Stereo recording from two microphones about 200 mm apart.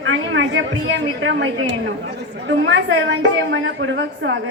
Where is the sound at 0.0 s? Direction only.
75° right (ahead or behind).